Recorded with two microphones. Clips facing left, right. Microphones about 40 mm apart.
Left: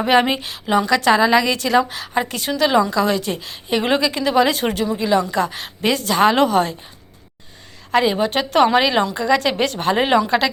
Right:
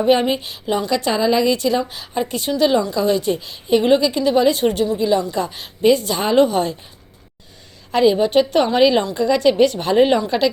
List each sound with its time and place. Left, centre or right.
0.0 s a woman's voice: left
7.9 s a woman's voice: left